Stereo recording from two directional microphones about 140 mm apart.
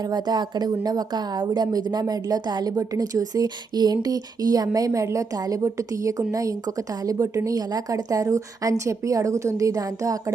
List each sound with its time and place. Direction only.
0.0 s a woman's voice: 30° right (ahead or behind)